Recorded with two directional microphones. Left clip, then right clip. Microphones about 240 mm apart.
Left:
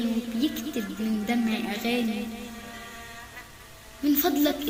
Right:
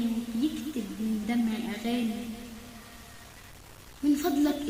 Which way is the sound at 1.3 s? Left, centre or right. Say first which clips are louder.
Left 4 dB; left.